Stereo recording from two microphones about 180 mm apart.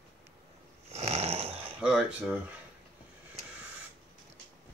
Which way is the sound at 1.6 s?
5° right (ahead or behind).